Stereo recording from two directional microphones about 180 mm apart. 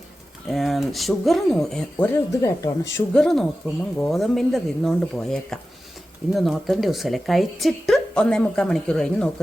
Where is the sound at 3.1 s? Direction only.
5° left (ahead or behind).